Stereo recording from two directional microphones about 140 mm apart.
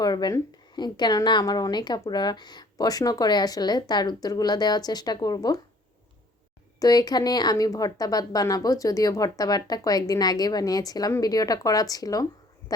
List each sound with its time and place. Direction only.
0.0 s a woman's voice: 30° left (ahead or behind)
6.7 s a woman's voice: 25° left (ahead or behind)